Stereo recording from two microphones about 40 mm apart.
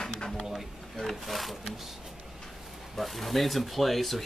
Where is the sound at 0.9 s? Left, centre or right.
Centre.